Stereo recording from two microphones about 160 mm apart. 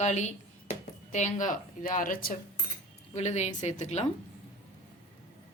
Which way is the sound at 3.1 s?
45° left (ahead or behind).